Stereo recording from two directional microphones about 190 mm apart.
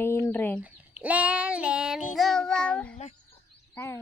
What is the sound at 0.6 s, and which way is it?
Child singing, 5° right (ahead or behind).